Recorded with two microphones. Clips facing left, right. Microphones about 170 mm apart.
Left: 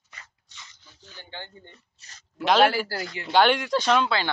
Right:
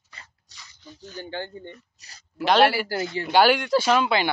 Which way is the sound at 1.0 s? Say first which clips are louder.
Right 9 dB; 45° right (ahead or behind).